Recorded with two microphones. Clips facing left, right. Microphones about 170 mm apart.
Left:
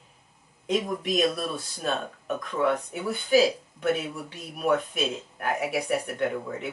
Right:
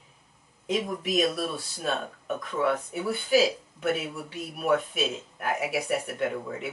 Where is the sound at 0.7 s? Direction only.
5° right (ahead or behind).